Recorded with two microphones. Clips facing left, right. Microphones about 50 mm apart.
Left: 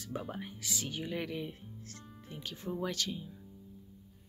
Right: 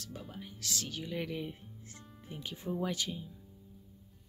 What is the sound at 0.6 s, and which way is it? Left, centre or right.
Speech, centre.